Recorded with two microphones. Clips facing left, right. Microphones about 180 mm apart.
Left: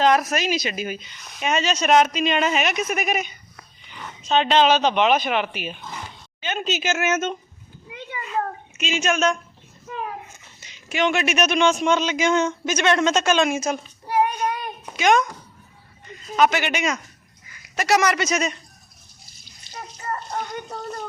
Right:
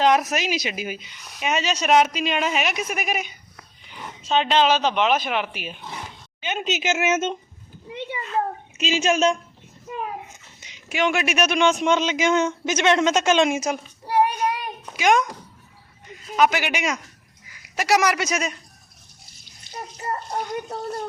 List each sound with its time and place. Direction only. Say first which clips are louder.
0.0 s a woman's voice: even; 15° right (ahead or behind)
7.9 s a sound: right 3 dB; 25° right (ahead or behind)
10.6 s speech: left 1 dB; 15° right (ahead or behind)
14.9 s speech: left 1 dB; 10° right (ahead or behind)
19.7 s water: right 2 dB; 55° right (ahead or behind)
20.7 s speech: right 3 dB; 5° right (ahead or behind)